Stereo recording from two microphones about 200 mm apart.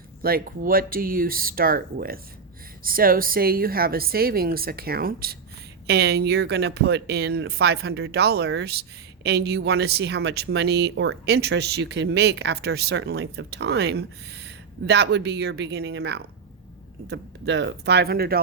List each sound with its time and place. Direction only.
0.2 s a woman's voice: 50° right (ahead or behind)